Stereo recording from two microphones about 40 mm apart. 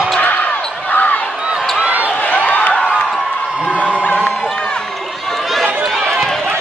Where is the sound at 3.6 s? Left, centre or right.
Right.